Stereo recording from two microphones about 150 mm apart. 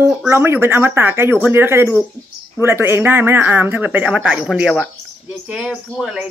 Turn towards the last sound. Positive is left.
turn(degrees=-5)  # may be behind; listen again after turning